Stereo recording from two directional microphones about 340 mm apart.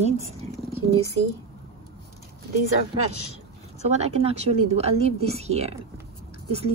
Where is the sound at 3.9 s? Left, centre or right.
Centre.